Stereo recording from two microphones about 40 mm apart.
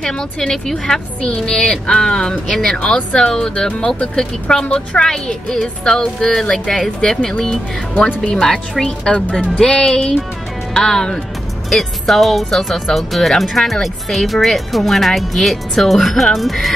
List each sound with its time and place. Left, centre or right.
0.0 s speech: centre
11.7 s speech: centre